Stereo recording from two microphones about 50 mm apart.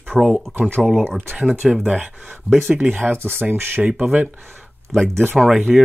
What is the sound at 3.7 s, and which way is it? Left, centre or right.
Speech, right.